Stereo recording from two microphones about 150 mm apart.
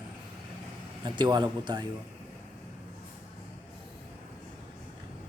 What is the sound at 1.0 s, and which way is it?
Speech, 30° right (ahead or behind).